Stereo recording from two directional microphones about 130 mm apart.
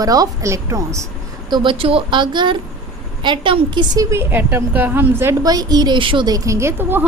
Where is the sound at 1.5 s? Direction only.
40° right (ahead or behind); by 5.3 s 20° right (ahead or behind).